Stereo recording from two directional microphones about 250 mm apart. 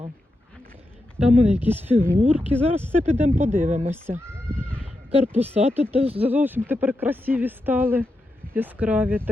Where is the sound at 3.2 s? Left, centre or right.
Right.